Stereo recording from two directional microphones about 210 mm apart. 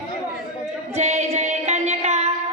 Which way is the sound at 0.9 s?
30° right (ahead or behind).